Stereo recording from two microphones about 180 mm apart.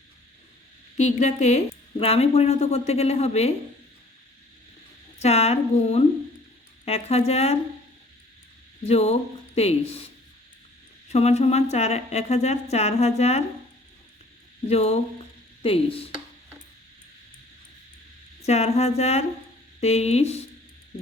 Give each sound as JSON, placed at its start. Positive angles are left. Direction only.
{"t": 0.9, "sound": "speech", "side_deg": 40}
{"t": 5.2, "sound": "speech", "side_deg": 35}
{"t": 8.9, "sound": "speech", "side_deg": 35}
{"t": 11.1, "sound": "speech", "side_deg": 35}
{"t": 14.7, "sound": "speech", "side_deg": 35}
{"t": 18.4, "sound": "speech", "side_deg": 35}